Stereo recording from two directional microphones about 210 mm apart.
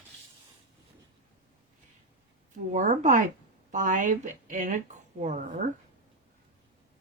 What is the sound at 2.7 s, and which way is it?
A woman's voice, 35° right (ahead or behind).